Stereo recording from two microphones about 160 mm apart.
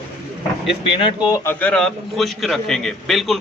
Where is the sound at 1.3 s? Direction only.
15° left (ahead or behind).